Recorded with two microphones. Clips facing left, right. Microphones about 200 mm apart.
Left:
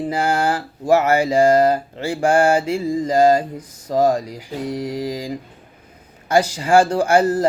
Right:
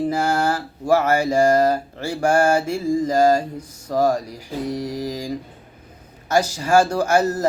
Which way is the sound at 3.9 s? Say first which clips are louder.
Left 2 dB; 25° left (ahead or behind).